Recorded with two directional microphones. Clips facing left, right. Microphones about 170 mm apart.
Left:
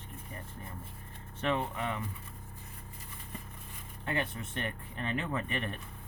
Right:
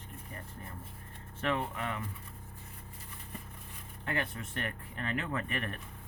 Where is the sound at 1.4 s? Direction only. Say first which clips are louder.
Left 1 dB; 20° left (ahead or behind).